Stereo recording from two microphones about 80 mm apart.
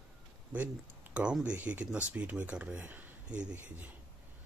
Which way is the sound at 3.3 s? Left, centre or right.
Centre.